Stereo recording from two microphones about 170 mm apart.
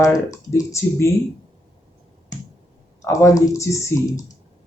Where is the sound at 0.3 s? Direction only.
20° left (ahead or behind).